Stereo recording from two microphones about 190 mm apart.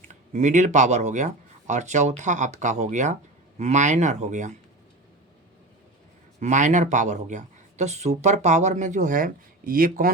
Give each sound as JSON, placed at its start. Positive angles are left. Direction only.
{"t": 0.1, "sound": "speech", "side_deg": -40}
{"t": 6.4, "sound": "speech", "side_deg": -40}